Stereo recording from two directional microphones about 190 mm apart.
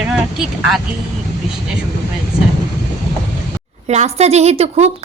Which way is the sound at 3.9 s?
35° right (ahead or behind).